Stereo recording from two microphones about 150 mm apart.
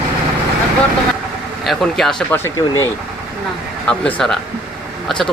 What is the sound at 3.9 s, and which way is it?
Speech, 5° left (ahead or behind).